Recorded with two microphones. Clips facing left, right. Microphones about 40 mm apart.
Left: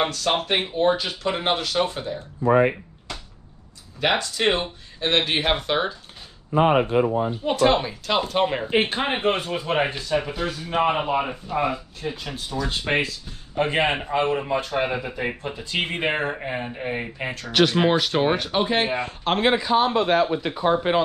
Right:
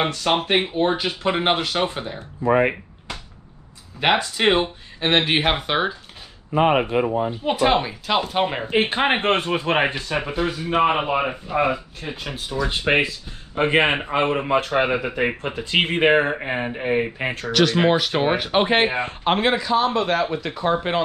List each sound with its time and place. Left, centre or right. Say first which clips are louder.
0.0 s speech: right 2 dB; centre
4.0 s speech: right 3 dB; right
6.5 s speech: even; right
7.2 s speech: even; centre
9.0 s speech: right 4 dB; right
17.5 s a man's voice: even; centre
17.7 s speech: right 1 dB; centre
18.5 s speech: right 4 dB; right
19.5 s a man's voice: even; centre
20.7 s speech: left 1 dB; centre